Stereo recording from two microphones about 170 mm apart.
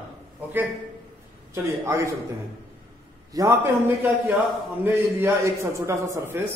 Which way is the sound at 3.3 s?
15° right (ahead or behind).